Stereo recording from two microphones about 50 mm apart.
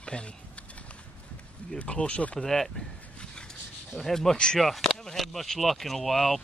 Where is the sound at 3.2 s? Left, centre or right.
Centre.